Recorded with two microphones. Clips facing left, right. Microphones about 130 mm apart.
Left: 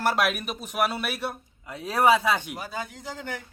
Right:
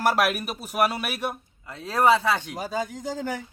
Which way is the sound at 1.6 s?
15° left (ahead or behind).